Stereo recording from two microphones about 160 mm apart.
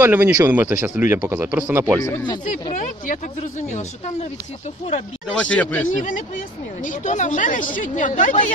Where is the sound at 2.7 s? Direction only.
55° left (ahead or behind).